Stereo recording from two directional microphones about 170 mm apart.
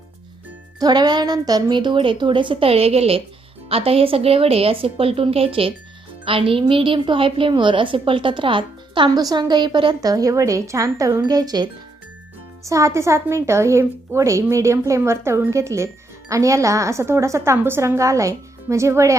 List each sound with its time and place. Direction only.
0.8 s a woman's voice: 25° right (ahead or behind)